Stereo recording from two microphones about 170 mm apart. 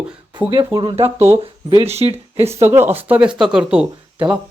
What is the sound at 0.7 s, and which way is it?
Speech, 35° right (ahead or behind).